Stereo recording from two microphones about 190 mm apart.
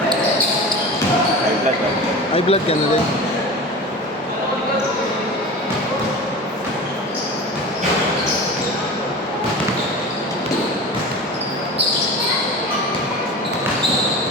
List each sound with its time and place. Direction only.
2.3 s speech: 30° left (ahead or behind)